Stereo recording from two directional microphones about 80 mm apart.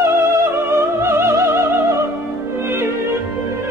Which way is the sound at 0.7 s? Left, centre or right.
Right.